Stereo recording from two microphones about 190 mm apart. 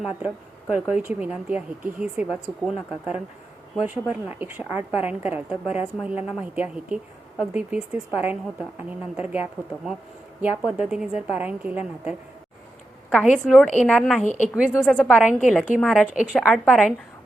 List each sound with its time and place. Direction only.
0.0 s a woman's voice: 5° right (ahead or behind)
13.1 s a woman's voice: 5° left (ahead or behind)
14.3 s a woman's voice: 40° left (ahead or behind)
14.7 s a woman's voice: 10° left (ahead or behind)